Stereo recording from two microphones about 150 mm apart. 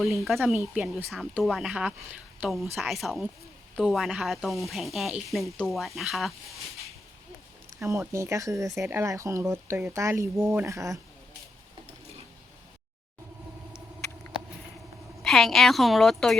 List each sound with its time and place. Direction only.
0.0 s a woman's voice: centre (ahead or behind)
7.8 s speech: 20° right (ahead or behind)
15.2 s speech: centre (ahead or behind)